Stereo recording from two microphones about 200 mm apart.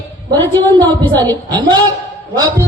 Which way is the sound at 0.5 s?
20° right (ahead or behind).